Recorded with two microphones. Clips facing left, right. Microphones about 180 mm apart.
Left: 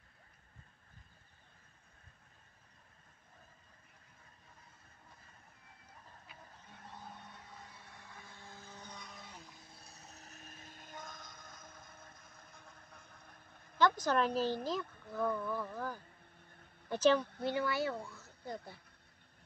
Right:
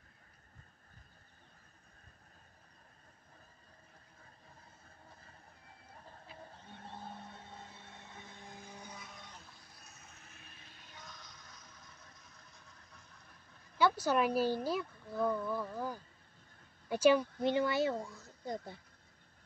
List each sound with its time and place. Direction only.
6.2 s vehicle: 30° right (ahead or behind); by 9.4 s centre (ahead or behind)
9.6 s vehicle: 25° left (ahead or behind); by 13.1 s 55° left (ahead or behind)
13.7 s speech: 10° right (ahead or behind)